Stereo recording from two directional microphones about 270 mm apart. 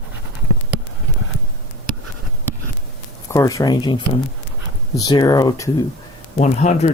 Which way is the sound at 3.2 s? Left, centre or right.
Centre.